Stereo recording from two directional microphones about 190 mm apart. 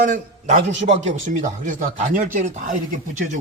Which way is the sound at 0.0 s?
40° right (ahead or behind).